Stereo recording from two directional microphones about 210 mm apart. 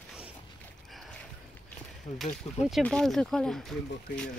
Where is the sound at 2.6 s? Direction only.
Centre (ahead or behind).